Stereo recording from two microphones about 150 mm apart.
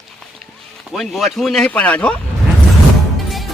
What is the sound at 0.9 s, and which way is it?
Speech, centre (ahead or behind).